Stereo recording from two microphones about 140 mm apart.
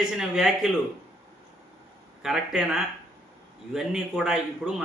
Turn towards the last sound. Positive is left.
turn(degrees=-5)  # may be behind; listen again after turning